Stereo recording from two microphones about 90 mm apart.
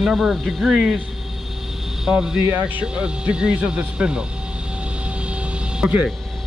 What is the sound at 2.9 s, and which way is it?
Speech, 10° right (ahead or behind).